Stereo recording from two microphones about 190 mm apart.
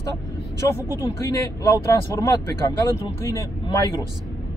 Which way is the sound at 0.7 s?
15° left (ahead or behind).